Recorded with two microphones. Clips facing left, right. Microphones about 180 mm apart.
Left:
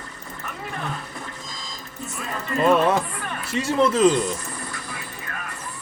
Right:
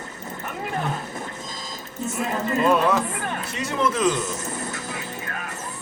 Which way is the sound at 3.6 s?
30° left (ahead or behind).